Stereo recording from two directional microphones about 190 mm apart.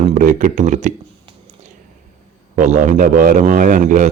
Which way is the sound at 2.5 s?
40° right (ahead or behind).